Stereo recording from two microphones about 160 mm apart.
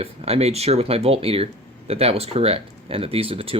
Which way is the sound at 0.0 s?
40° right (ahead or behind).